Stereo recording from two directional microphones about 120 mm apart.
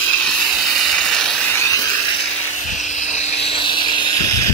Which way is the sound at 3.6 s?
40° left (ahead or behind).